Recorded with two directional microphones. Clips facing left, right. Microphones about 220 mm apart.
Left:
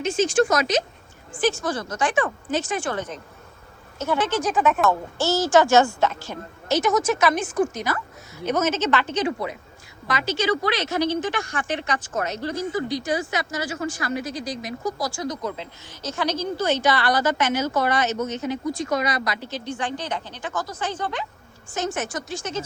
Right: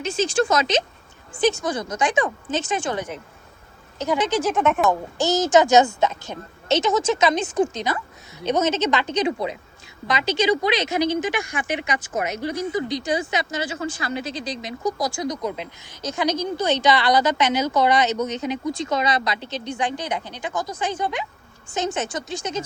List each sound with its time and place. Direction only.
0.0 s a woman's voice: 30° right (ahead or behind); by 4.3 s 15° right (ahead or behind)
4.4 s speech: centre (ahead or behind)
4.9 s a woman's voice: 15° right (ahead or behind)